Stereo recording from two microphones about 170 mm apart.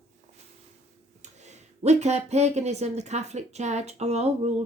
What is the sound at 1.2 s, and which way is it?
Speech, 40° right (ahead or behind).